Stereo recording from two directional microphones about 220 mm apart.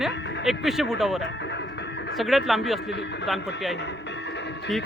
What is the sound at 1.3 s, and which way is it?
Music, 50° left (ahead or behind).